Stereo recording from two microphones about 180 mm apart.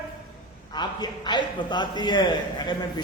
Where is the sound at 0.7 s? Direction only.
25° left (ahead or behind).